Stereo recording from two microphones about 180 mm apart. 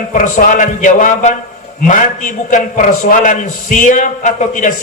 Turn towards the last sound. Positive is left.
turn(degrees=45)  # may be behind; listen again after turning